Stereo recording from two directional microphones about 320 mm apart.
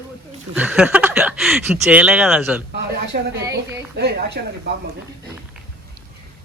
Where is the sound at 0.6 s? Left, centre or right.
Centre.